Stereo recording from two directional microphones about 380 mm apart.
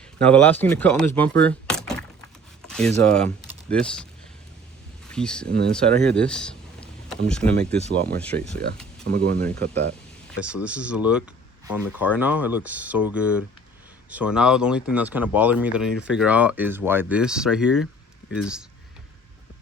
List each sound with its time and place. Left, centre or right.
0.2 s speech: centre
1.4 s a sound: centre
2.6 s speech: centre
5.1 s speech: centre
9.0 s speech: right
9.4 s speech: centre